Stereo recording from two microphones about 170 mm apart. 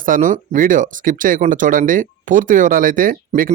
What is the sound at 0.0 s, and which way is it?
Speech, 50° right (ahead or behind).